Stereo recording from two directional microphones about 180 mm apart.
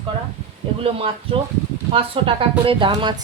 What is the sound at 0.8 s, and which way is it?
Speech, 30° right (ahead or behind).